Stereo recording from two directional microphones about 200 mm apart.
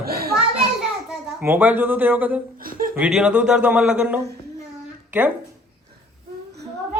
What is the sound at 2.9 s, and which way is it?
Speech, 5° right (ahead or behind).